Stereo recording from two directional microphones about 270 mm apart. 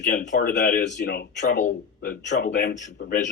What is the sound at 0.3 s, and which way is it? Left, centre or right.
A man's voice, left.